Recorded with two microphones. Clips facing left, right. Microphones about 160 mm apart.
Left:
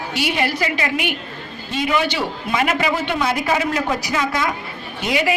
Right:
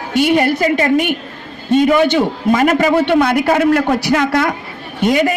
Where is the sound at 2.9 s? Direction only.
60° right (ahead or behind).